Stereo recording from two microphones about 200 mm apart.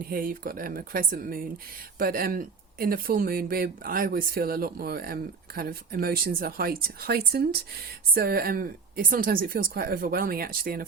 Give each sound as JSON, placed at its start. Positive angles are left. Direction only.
{"t": 0.0, "sound": "speech", "side_deg": -45}